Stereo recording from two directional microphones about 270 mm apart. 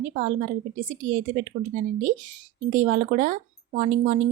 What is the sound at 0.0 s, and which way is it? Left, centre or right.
Speech, right.